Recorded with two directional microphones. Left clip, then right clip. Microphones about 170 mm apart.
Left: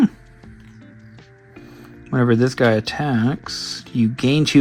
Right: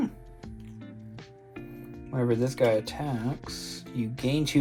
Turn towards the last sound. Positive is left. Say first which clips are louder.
# left 10 dB
turn(degrees=50)  # may be behind; listen again after turning